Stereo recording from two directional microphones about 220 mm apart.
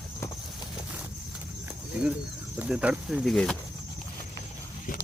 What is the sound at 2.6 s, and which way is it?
Speech, 5° right (ahead or behind).